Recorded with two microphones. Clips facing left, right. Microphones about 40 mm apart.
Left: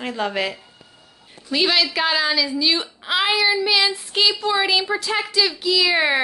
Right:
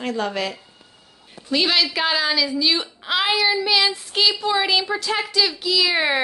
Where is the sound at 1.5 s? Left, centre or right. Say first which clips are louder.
Left 1 dB; centre.